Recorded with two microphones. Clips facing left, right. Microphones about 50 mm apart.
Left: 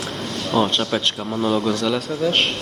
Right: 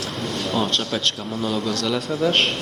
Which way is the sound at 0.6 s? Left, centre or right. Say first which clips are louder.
Left 2 dB; centre.